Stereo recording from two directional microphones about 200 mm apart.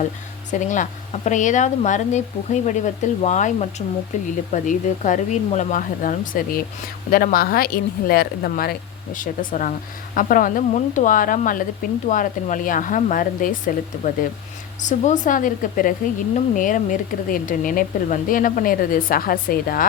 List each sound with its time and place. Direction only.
0.5 s speech: 40° left (ahead or behind)